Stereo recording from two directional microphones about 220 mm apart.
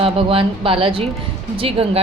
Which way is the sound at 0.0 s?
25° right (ahead or behind).